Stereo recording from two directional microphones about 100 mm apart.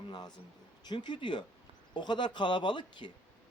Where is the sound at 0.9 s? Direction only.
50° left (ahead or behind).